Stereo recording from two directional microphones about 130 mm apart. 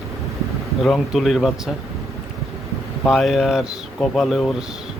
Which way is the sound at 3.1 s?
Centre (ahead or behind).